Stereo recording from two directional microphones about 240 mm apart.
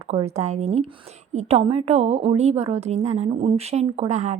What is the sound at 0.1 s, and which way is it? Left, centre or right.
A woman's voice, right.